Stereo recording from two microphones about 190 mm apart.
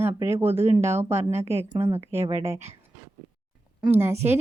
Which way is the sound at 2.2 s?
30° right (ahead or behind).